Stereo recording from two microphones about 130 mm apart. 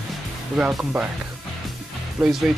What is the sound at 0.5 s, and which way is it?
Speech, 5° right (ahead or behind).